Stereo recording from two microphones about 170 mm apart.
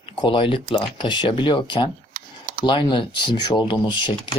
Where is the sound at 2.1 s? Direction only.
55° right (ahead or behind).